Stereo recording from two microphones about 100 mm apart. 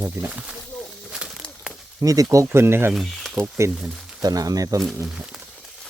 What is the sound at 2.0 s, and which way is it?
Speech, 35° right (ahead or behind).